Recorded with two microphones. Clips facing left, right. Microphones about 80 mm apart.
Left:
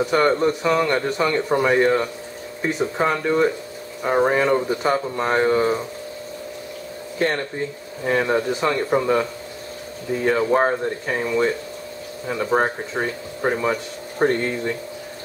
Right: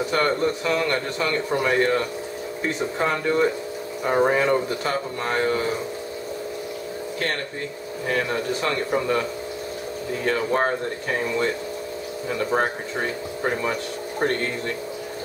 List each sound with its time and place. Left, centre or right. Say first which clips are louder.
0.0 s speech: left 4 dB; centre
4.6 s speech: left 4 dB; centre
8.1 s speech: left 5 dB; left
12.5 s speech: left 5 dB; centre